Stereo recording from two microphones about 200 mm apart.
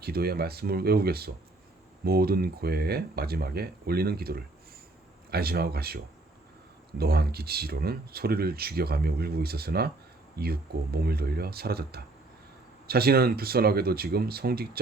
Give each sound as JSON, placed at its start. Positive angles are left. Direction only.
{"t": 0.0, "sound": "speech", "side_deg": -50}
{"t": 7.0, "sound": "speech", "side_deg": -50}